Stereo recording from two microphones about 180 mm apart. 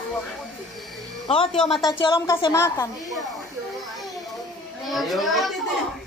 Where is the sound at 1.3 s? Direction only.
35° left (ahead or behind).